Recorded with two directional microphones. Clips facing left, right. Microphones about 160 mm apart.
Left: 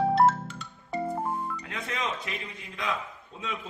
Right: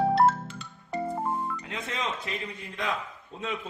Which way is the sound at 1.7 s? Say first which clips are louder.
Left 2 dB; 25° right (ahead or behind).